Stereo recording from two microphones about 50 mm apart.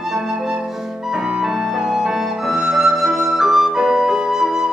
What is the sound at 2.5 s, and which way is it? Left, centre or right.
Flute, centre.